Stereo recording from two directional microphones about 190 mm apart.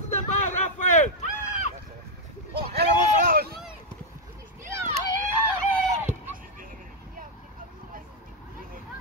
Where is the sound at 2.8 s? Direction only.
55° right (ahead or behind).